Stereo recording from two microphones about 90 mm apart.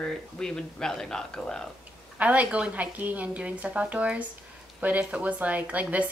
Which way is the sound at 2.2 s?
15° right (ahead or behind).